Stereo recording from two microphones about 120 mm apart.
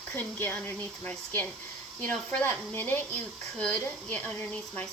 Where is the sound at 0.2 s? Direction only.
20° left (ahead or behind).